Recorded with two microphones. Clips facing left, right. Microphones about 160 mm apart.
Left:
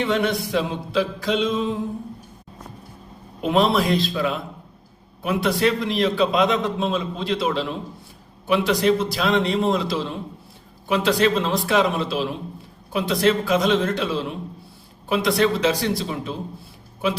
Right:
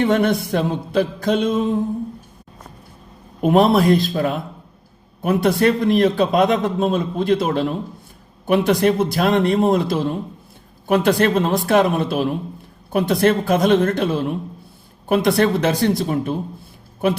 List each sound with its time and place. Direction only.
0.0 s a man's voice: 50° right (ahead or behind)
3.4 s a man's voice: 50° right (ahead or behind)